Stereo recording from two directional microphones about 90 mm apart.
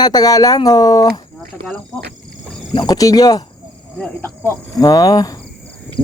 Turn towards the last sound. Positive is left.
turn(degrees=45)  # may be behind; listen again after turning